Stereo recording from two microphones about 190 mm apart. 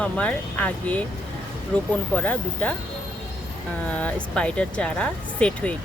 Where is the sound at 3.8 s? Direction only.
5° left (ahead or behind).